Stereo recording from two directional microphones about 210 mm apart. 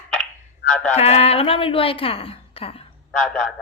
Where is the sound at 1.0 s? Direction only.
30° left (ahead or behind).